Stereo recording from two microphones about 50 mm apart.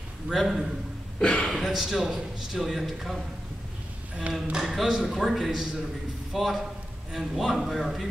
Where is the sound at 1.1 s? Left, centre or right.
Centre.